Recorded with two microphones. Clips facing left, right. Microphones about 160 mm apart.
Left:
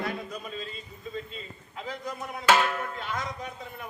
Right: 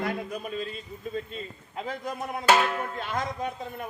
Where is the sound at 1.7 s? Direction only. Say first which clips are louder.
Right 3 dB; 50° right (ahead or behind).